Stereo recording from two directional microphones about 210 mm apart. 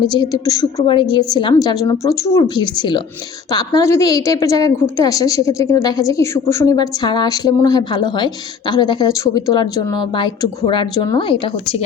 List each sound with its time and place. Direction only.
0.1 s a woman's voice: 20° left (ahead or behind)